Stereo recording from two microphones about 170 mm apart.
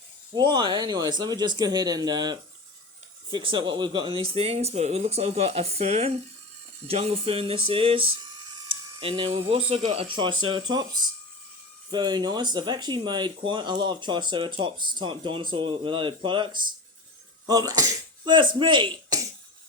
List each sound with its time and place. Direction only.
0.3 s speech: 25° right (ahead or behind)